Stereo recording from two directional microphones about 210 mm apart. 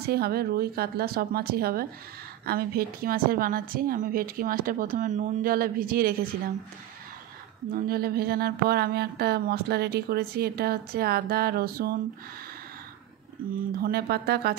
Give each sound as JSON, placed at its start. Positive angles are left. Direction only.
{"t": 0.0, "sound": "speech", "side_deg": -50}
{"t": 7.7, "sound": "speech", "side_deg": -45}
{"t": 13.7, "sound": "speech", "side_deg": -45}